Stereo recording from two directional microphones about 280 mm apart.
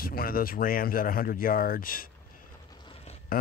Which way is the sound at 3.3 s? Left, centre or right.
Left.